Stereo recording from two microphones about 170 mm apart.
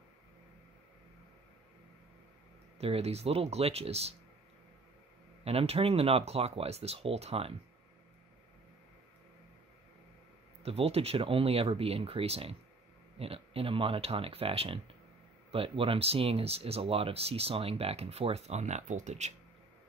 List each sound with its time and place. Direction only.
2.8 s speech: 35° right (ahead or behind)
5.4 s speech: 35° right (ahead or behind)
10.6 s speech: 35° right (ahead or behind)